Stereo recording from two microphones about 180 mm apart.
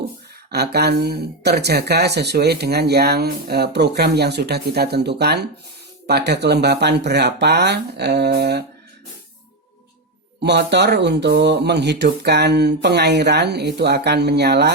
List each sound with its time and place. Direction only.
0.5 s speech: 65° right (ahead or behind)
10.4 s speech: 70° right (ahead or behind)